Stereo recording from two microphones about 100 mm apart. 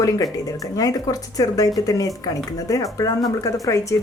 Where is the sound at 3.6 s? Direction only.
30° left (ahead or behind).